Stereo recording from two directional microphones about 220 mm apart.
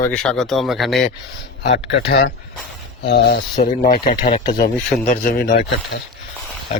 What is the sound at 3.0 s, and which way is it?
Speech, 45° left (ahead or behind).